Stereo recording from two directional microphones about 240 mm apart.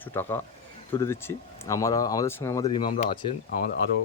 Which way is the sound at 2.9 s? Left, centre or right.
Left.